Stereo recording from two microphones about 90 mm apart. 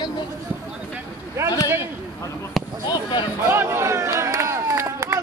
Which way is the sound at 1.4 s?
30° right (ahead or behind).